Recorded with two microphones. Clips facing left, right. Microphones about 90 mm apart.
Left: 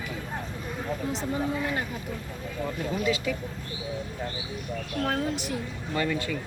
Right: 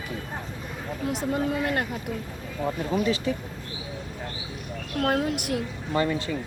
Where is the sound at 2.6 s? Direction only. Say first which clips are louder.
Right 3 dB; 35° right (ahead or behind).